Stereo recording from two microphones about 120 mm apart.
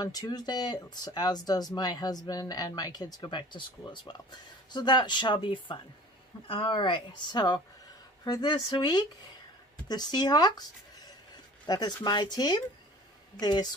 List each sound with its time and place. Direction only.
0.0 s speech: 35° left (ahead or behind)
11.6 s speech: 35° left (ahead or behind)